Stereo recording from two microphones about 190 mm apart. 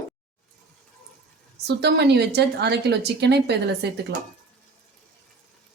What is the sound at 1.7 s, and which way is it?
Speech, 60° right (ahead or behind).